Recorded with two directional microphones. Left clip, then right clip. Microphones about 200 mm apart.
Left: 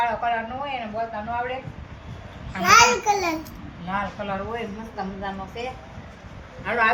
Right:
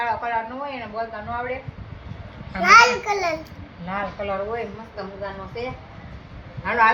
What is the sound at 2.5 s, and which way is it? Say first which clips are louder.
Speech: right 2 dB; 20° right (ahead or behind).